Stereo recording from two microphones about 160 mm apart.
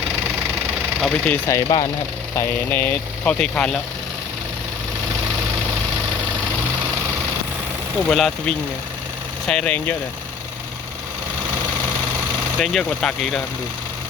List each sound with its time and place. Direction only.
1.0 s speech: 10° left (ahead or behind)
8.0 s speech: 5° left (ahead or behind)
12.5 s speech: 5° left (ahead or behind)